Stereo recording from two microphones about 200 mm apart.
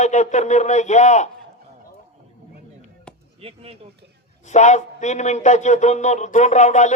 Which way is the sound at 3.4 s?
30° right (ahead or behind).